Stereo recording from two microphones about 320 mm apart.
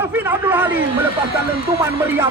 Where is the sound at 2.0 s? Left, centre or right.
Centre.